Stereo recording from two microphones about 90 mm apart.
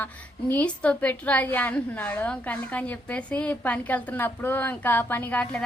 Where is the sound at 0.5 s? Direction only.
15° left (ahead or behind).